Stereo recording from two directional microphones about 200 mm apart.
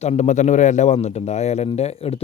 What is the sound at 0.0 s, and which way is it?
A man's voice, 35° left (ahead or behind).